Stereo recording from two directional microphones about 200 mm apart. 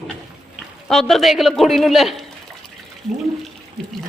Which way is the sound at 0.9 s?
Centre (ahead or behind).